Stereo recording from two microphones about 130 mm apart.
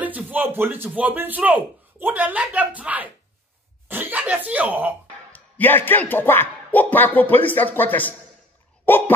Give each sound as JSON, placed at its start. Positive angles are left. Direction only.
{"t": 0.0, "sound": "speech", "side_deg": -15}
{"t": 5.3, "sound": "speech", "side_deg": 15}
{"t": 8.8, "sound": "a sound", "side_deg": 15}